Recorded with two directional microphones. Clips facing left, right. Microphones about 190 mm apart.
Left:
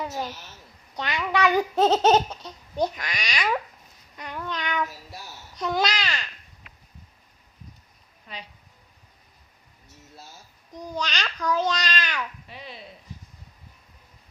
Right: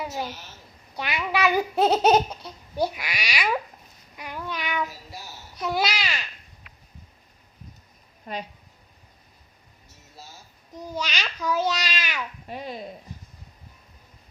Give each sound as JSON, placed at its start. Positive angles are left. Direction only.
{"t": 0.0, "sound": "a woman's voice", "side_deg": -10}
{"t": 8.3, "sound": "speech", "side_deg": -45}
{"t": 10.8, "sound": "a child's voice", "side_deg": -5}
{"t": 12.5, "sound": "speech", "side_deg": -45}